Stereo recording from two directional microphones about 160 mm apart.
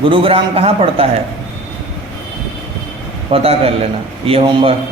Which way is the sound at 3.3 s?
40° right (ahead or behind).